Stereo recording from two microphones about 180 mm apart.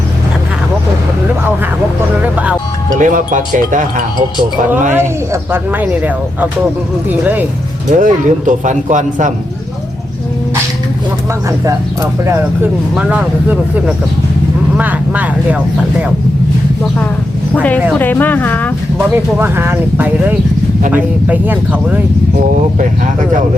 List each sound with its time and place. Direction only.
2.2 s music: 10° right (ahead or behind)
3.0 s speech: 45° right (ahead or behind)
4.9 s speech: 10° right (ahead or behind)
7.9 s speech: 45° right (ahead or behind)
12.2 s speech: 15° right (ahead or behind)
17.5 s speech: 10° left (ahead or behind)
18.9 s speech: 10° right (ahead or behind)